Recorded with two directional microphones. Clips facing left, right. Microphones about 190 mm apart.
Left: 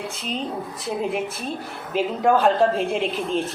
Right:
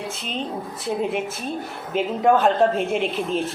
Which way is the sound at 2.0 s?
Centre (ahead or behind).